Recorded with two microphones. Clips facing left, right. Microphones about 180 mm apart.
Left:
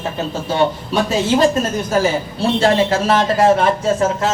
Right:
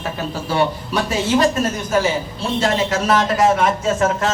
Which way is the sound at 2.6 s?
30° left (ahead or behind).